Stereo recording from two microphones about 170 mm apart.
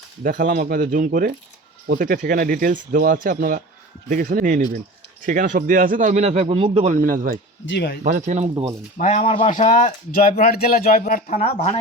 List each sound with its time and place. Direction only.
0.2 s a man's voice: 55° right (ahead or behind)
7.6 s speech: 90° left
8.0 s a man's voice: 50° right (ahead or behind)
9.0 s speech: 45° left (ahead or behind)